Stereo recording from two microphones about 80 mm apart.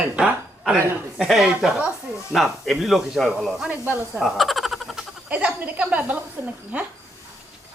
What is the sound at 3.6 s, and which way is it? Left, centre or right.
Speech, right.